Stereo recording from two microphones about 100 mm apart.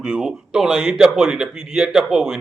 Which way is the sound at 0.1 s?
5° right (ahead or behind).